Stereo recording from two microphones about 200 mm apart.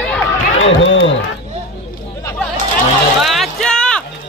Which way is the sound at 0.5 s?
70° left (ahead or behind).